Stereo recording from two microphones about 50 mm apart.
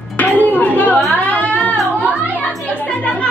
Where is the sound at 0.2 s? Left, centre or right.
Left.